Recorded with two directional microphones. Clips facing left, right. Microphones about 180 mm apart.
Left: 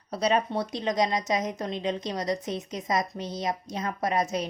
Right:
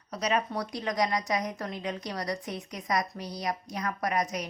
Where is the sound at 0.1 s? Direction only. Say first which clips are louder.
Left 4 dB; 30° left (ahead or behind).